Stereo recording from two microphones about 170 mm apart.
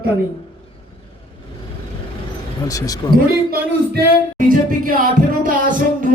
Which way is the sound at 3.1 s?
60° right (ahead or behind).